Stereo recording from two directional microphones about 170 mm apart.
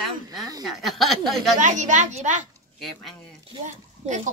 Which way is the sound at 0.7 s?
Centre (ahead or behind).